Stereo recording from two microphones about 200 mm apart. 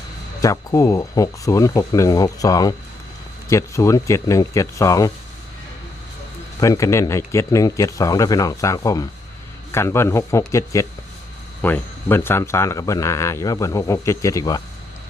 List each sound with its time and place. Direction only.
0.4 s speech: 15° left (ahead or behind)
6.6 s speech: 15° left (ahead or behind)